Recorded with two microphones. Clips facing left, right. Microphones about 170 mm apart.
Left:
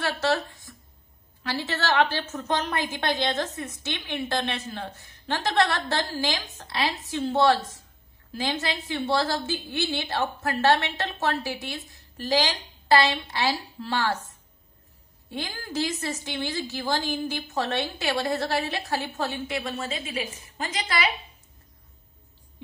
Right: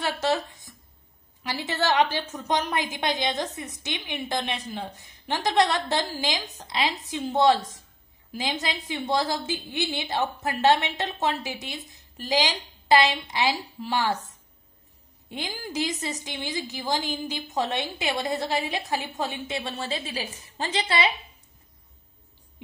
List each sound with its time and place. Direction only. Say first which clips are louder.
0.0 s speech: even; 20° right (ahead or behind)
0.5 s a sound: left 2 dB; 20° right (ahead or behind)
1.4 s a woman's voice: right 1 dB; 15° right (ahead or behind)
15.2 s a woman's voice: even; 15° right (ahead or behind)